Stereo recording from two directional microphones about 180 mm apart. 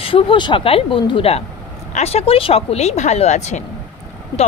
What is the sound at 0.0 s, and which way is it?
A woman's voice, 30° left (ahead or behind).